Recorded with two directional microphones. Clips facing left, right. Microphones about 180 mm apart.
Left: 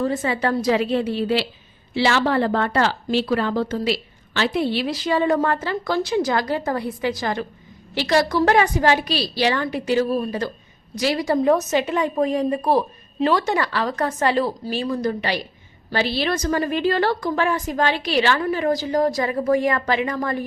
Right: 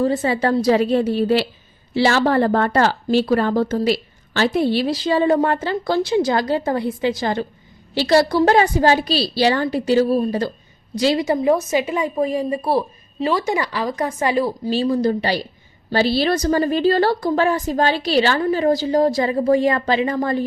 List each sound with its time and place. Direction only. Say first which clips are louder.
0.0 s a woman's voice: right 3 dB; 35° right (ahead or behind)
11.3 s a woman's voice: even; 10° right (ahead or behind)
14.7 s speech: right 5 dB; 30° right (ahead or behind)